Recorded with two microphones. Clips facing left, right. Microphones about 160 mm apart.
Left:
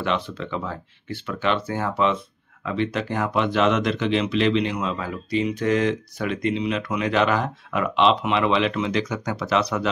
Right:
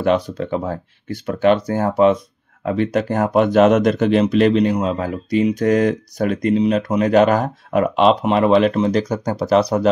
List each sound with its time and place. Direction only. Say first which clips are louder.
0.0 s speech: right 8 dB; 45° right (ahead or behind)